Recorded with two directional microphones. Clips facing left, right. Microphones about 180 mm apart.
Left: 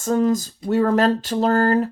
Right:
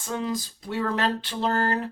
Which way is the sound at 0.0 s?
45° left (ahead or behind).